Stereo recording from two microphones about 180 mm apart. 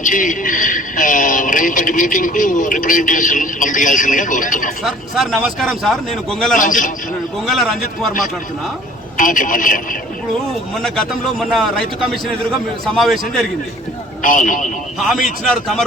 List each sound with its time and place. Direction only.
0.0 s a man's voice: 45° left (ahead or behind)
4.8 s a man's voice: centre (ahead or behind)
6.6 s a man's voice: 45° left (ahead or behind)
7.4 s a man's voice: centre (ahead or behind)
9.1 s a man's voice: 50° left (ahead or behind)
10.8 s a man's voice: centre (ahead or behind)
14.2 s a man's voice: 45° left (ahead or behind)
15.4 s a man's voice: centre (ahead or behind)